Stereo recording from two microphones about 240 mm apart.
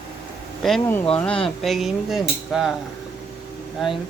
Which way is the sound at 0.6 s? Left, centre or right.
Centre.